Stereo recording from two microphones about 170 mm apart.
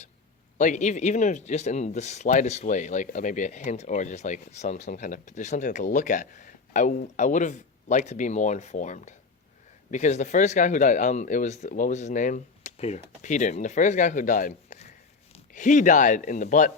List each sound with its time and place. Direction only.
0.6 s speech: 45° left (ahead or behind)